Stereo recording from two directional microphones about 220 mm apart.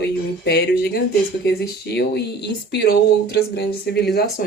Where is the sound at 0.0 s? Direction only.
45° left (ahead or behind).